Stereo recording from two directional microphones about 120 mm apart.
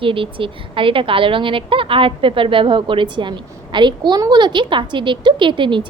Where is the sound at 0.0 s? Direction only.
45° right (ahead or behind).